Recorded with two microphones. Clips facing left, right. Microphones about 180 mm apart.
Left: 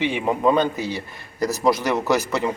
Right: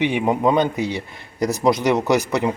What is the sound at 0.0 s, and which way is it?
A man's voice, 15° right (ahead or behind).